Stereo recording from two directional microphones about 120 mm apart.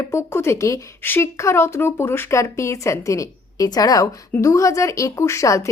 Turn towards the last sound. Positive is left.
turn(degrees=25)  # may be behind; listen again after turning